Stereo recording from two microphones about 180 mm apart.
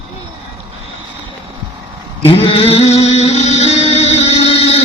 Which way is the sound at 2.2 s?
30° left (ahead or behind).